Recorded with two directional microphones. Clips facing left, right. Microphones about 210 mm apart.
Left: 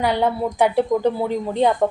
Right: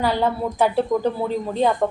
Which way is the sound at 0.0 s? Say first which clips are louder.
Left 1 dB; 15° left (ahead or behind).